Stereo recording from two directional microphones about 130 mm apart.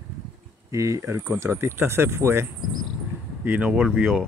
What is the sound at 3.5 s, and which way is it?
Speech, 10° right (ahead or behind).